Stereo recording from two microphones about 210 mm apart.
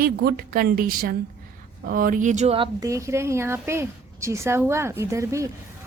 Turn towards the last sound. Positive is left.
turn(degrees=-15)  # may be behind; listen again after turning